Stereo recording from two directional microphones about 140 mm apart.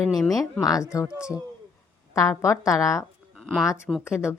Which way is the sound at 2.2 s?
20° left (ahead or behind).